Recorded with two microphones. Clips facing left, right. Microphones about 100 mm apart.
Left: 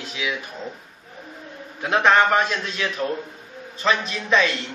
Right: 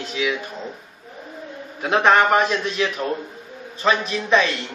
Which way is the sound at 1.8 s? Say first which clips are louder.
Right 1 dB; 15° right (ahead or behind).